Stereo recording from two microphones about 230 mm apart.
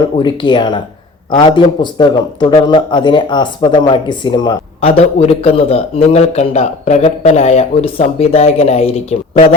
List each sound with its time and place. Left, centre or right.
0.2 s a man's voice: centre